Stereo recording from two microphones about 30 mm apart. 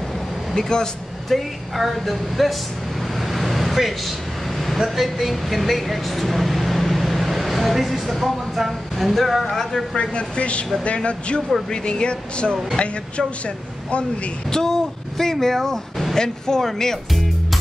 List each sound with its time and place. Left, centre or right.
0.6 s speech: left
1.3 s speech: centre
3.2 s vehicle: centre
4.7 s speech: centre
9.9 s speech: left
11.7 s speech: left
14.7 s speech: centre